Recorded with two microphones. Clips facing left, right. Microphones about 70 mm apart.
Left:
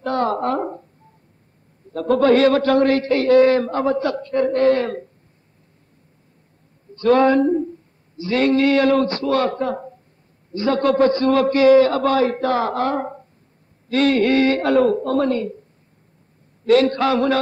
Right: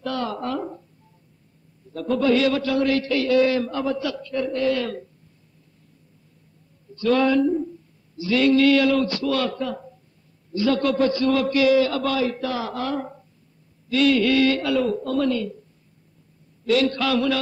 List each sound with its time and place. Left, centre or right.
0.0 s a sound: left
1.9 s a man's voice: left
7.0 s a man's voice: left
16.6 s a man's voice: left